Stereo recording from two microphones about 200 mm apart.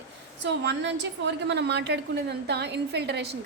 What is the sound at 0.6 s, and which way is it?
A woman's voice, 60° right (ahead or behind).